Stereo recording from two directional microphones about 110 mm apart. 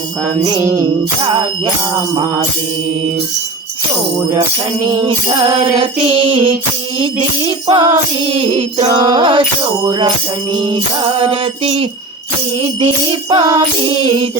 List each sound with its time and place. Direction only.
0.6 s music: 25° right (ahead or behind)
4.9 s music: 40° right (ahead or behind)
7.4 s music: 40° right (ahead or behind)
8.8 s music: 35° right (ahead or behind); by 11.9 s 60° right (ahead or behind)
12.8 s music: 50° right (ahead or behind)